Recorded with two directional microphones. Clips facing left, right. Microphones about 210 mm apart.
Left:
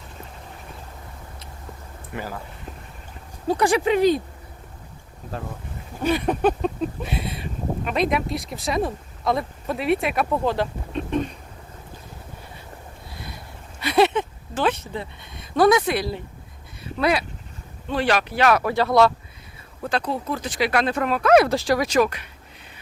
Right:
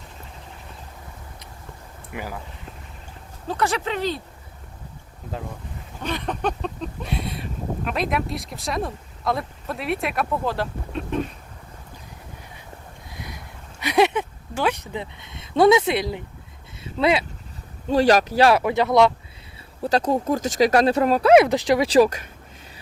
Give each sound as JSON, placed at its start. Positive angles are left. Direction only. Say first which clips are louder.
{"t": 2.1, "sound": "speech", "louder": "left 1 dB", "side_deg": -10}
{"t": 3.4, "sound": "speech", "louder": "left 5 dB", "side_deg": 15}
{"t": 6.0, "sound": "a sound", "louder": "left 6 dB", "side_deg": 10}
{"t": 13.1, "sound": "a sound", "louder": "right 2 dB", "side_deg": -15}
{"t": 16.8, "sound": "speech", "louder": "right 1 dB", "side_deg": -25}
{"t": 17.8, "sound": "speech", "louder": "right 5 dB", "side_deg": -40}
{"t": 18.6, "sound": "speech", "louder": "right 1 dB", "side_deg": -20}
{"t": 19.8, "sound": "speech", "louder": "right 5 dB", "side_deg": -40}
{"t": 21.3, "sound": "speech", "louder": "even", "side_deg": -20}
{"t": 21.8, "sound": "speech", "louder": "right 4 dB", "side_deg": -35}